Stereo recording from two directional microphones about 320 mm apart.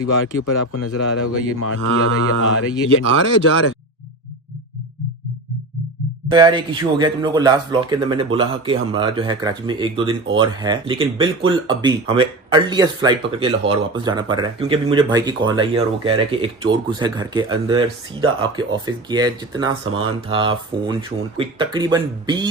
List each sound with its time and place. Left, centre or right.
0.7 s speech: left
6.3 s speech: centre
19.8 s speech: right
20.2 s speech: centre